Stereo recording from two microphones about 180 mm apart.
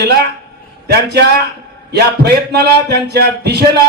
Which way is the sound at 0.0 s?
65° right (ahead or behind).